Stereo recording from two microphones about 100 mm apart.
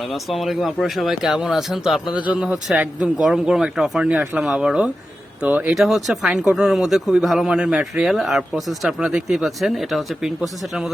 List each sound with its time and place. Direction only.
0.1 s a man's voice: centre (ahead or behind); by 3.1 s 15° right (ahead or behind)
3.2 s a man's voice: 5° right (ahead or behind)
5.7 s speech: centre (ahead or behind)